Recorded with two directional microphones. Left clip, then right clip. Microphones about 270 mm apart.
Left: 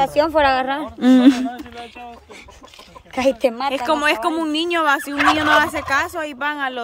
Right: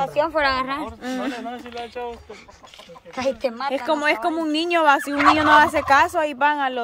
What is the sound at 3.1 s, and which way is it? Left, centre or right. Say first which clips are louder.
Speech: left 6 dB; left.